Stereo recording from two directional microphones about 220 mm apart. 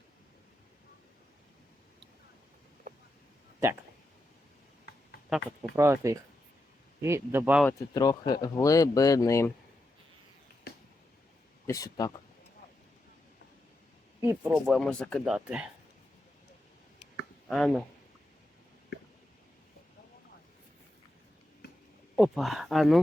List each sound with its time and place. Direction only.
5.7 s speech: 10° right (ahead or behind)
7.6 s speech: 15° left (ahead or behind)
11.6 s speech: 15° left (ahead or behind)
14.2 s speech: 10° right (ahead or behind)
14.7 s speech: 5° left (ahead or behind)
17.5 s speech: centre (ahead or behind)
22.1 s speech: centre (ahead or behind)